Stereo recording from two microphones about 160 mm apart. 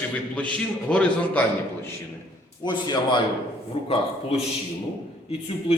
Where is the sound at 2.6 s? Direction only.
30° left (ahead or behind).